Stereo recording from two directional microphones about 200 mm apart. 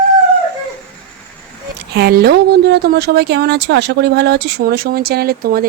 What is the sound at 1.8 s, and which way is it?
Speech, 50° right (ahead or behind).